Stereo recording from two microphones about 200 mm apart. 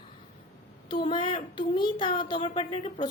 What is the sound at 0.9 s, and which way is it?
A woman's voice, 25° left (ahead or behind).